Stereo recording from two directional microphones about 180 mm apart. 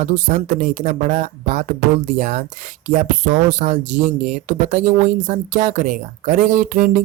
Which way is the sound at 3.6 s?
40° right (ahead or behind).